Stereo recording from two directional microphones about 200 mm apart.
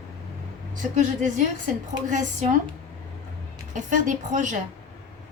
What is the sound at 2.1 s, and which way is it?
Speech, 35° right (ahead or behind).